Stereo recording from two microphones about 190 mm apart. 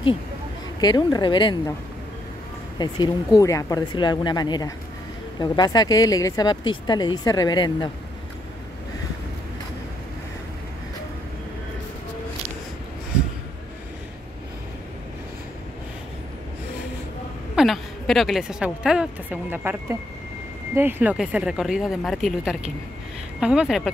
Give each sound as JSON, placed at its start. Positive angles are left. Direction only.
{"t": 0.7, "sound": "speech", "side_deg": 20}
{"t": 2.8, "sound": "speech", "side_deg": 20}
{"t": 17.6, "sound": "a woman's voice", "side_deg": 0}